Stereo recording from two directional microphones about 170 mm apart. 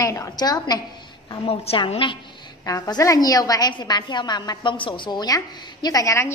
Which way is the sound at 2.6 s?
20° left (ahead or behind).